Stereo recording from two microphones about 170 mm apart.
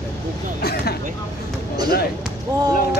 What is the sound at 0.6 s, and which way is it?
Vehicle, 65° left (ahead or behind).